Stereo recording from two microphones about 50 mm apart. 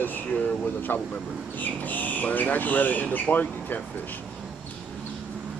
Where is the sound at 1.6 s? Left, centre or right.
Left.